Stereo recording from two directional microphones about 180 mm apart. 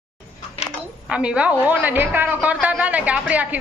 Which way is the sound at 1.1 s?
5° right (ahead or behind).